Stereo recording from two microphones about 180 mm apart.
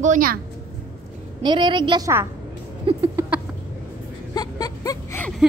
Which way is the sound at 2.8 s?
30° right (ahead or behind).